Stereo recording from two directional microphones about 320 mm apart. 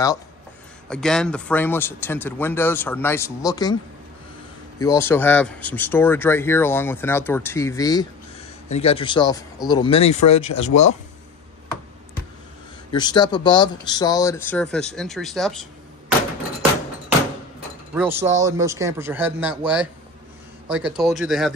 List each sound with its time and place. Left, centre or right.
0.8 s speech: centre
4.7 s speech: centre
12.9 s speech: centre
17.9 s speech: centre